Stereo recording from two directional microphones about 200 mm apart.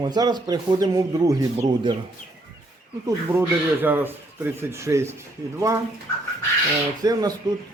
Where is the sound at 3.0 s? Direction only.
10° right (ahead or behind).